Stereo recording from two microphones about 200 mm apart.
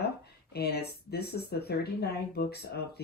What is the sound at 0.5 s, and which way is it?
Speech, 55° left (ahead or behind).